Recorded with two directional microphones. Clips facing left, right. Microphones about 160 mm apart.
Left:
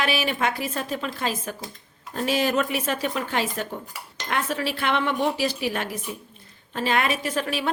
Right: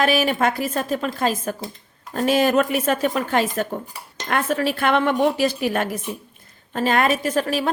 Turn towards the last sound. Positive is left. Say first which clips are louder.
# right 5 dB
turn(degrees=-40)  # may be behind; listen again after turning